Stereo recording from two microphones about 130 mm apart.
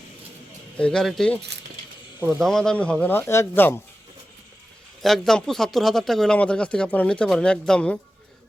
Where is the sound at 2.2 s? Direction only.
15° right (ahead or behind).